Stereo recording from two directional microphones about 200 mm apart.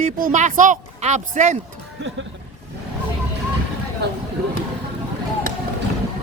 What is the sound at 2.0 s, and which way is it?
Speech, 65° right (ahead or behind).